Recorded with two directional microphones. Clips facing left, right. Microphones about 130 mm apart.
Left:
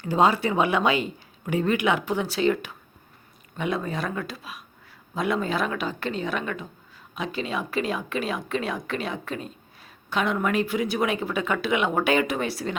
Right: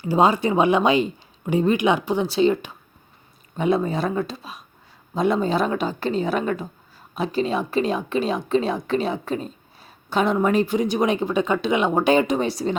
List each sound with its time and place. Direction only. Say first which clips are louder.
0.0 s a woman's voice: right 3 dB; 15° right (ahead or behind)